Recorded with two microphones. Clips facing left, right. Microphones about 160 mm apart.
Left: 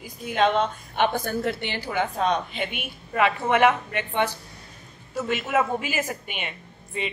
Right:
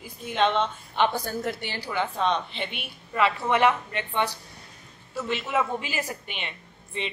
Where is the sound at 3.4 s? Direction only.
55° left (ahead or behind).